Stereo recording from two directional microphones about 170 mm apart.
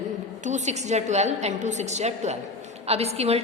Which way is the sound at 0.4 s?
45° right (ahead or behind).